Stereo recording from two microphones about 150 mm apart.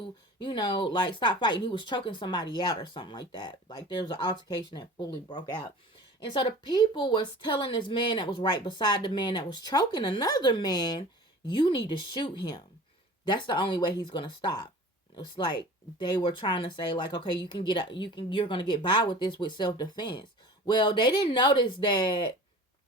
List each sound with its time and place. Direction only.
0.0 s a woman's voice: 30° left (ahead or behind)